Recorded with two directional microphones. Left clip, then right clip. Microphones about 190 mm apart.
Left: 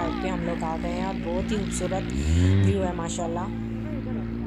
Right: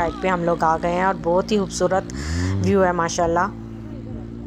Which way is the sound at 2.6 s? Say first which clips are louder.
Right 9 dB; centre (ahead or behind).